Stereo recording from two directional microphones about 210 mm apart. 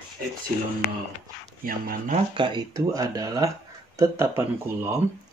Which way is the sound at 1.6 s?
45° right (ahead or behind).